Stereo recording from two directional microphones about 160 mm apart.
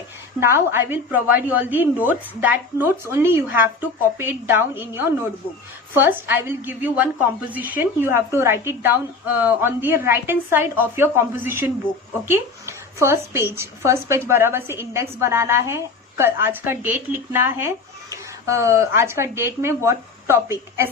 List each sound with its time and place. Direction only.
0.3 s a woman's voice: 15° right (ahead or behind)